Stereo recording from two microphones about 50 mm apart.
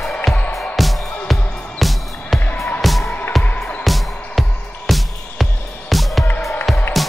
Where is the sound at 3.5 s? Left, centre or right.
Left.